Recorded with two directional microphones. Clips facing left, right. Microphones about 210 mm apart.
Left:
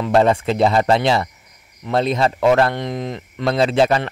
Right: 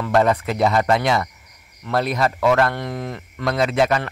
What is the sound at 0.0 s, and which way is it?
Speech, 25° left (ahead or behind).